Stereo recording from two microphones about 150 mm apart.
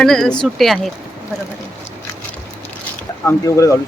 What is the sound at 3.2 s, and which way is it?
Speech, 20° left (ahead or behind).